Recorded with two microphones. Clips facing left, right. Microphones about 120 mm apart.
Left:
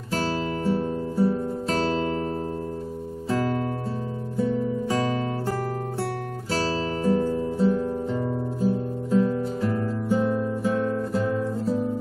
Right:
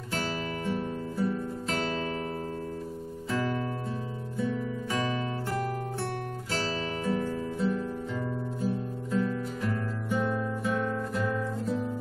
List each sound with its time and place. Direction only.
0.1 s guitar: 35° left (ahead or behind)
3.3 s music: 35° left (ahead or behind)
6.5 s music: 35° left (ahead or behind)
8.6 s guitar: 35° left (ahead or behind)